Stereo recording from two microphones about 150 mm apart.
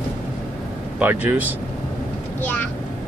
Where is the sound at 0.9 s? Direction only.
10° right (ahead or behind).